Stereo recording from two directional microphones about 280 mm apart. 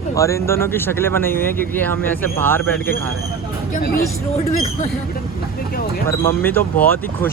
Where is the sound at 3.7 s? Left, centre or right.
Left.